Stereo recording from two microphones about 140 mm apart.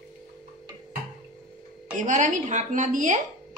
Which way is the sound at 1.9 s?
65° right (ahead or behind).